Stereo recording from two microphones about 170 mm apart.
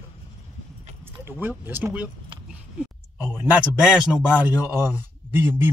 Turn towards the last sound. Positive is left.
turn(degrees=-15)  # may be behind; listen again after turning